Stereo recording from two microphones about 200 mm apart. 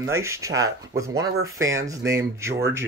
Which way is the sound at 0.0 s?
15° right (ahead or behind).